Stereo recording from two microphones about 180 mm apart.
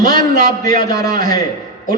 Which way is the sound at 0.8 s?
20° left (ahead or behind).